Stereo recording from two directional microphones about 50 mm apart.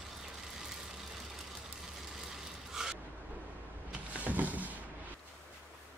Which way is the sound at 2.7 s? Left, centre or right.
Centre.